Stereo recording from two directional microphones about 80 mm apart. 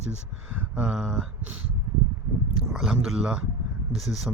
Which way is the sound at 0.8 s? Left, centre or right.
Centre.